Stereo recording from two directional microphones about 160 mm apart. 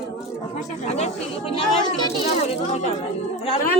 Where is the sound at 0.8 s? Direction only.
40° left (ahead or behind).